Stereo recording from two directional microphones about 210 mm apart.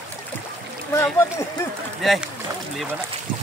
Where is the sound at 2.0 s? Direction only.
Centre (ahead or behind).